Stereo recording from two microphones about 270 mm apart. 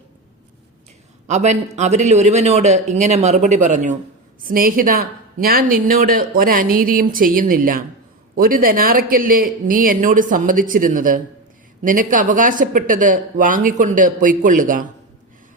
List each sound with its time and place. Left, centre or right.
1.3 s speech: right